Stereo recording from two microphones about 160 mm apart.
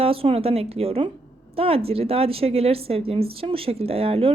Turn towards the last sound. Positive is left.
turn(degrees=-35)  # may be behind; listen again after turning